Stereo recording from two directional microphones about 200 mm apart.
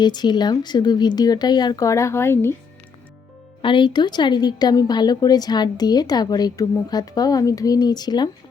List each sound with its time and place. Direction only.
0.0 s a woman's voice: 20° left (ahead or behind)
3.6 s a woman's voice: 25° left (ahead or behind)